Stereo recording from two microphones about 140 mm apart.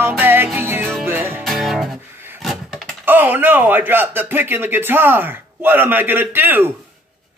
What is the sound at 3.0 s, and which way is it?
Speech, 15° right (ahead or behind).